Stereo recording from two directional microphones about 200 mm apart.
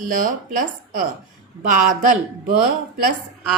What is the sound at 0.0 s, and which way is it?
A woman's voice, 40° right (ahead or behind).